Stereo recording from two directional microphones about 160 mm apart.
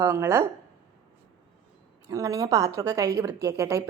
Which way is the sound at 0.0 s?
15° right (ahead or behind).